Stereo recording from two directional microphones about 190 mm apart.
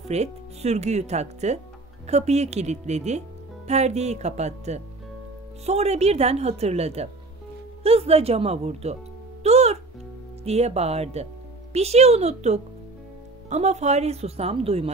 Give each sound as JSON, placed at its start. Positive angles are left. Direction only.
{"t": 0.1, "sound": "speech", "side_deg": -35}
{"t": 9.4, "sound": "music", "side_deg": -35}
{"t": 10.4, "sound": "speech", "side_deg": -35}